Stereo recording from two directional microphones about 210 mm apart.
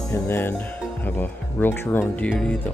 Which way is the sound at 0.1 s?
10° left (ahead or behind).